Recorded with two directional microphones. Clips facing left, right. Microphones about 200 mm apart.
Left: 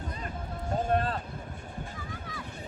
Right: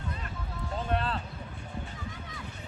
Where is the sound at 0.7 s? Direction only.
45° left (ahead or behind).